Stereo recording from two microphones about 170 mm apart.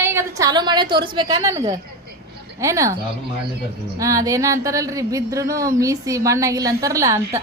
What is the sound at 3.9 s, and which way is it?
Speech, 20° right (ahead or behind).